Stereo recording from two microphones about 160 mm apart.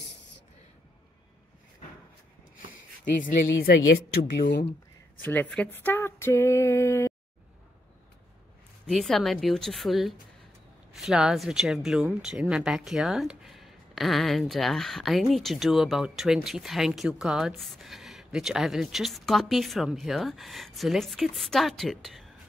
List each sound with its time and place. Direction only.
3.2 s speech: 50° left (ahead or behind)
3.6 s speech: 75° left (ahead or behind)
5.2 s speech: 10° left (ahead or behind)
8.8 s speech: centre (ahead or behind)